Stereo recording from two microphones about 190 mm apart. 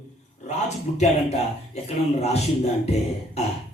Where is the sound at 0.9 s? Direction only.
35° left (ahead or behind).